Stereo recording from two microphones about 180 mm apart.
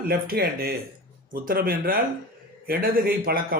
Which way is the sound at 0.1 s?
55° right (ahead or behind).